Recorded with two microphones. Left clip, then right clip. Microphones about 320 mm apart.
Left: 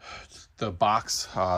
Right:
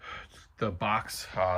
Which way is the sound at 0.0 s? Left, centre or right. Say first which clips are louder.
Even; centre.